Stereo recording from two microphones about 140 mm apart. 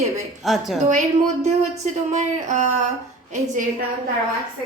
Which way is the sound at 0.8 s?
60° right (ahead or behind).